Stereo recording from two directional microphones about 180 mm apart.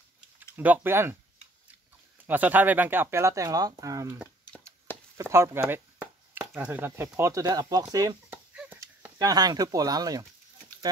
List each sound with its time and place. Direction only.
0.6 s speech: 10° right (ahead or behind)
2.2 s speech: 10° right (ahead or behind)